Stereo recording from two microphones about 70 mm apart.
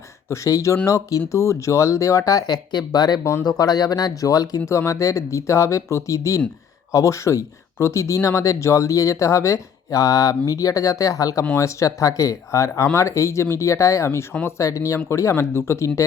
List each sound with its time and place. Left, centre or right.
0.3 s speech: left
2.5 s speech: left
3.4 s speech: left
4.6 s speech: left